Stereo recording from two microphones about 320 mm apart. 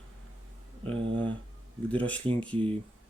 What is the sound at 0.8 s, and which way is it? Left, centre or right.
Speech, centre.